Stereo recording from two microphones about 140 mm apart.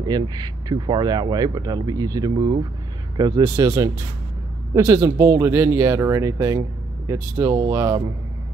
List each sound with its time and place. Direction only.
0.0 s speech: 30° right (ahead or behind)